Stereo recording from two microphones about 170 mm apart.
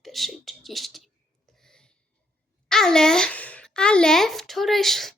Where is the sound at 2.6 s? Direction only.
5° left (ahead or behind).